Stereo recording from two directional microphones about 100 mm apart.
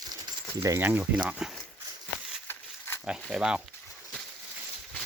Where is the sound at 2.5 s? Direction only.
25° left (ahead or behind).